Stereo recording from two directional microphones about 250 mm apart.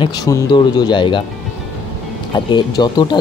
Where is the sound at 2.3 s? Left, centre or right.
Centre.